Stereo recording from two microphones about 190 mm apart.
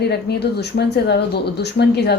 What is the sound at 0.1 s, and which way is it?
Speech, 60° left (ahead or behind).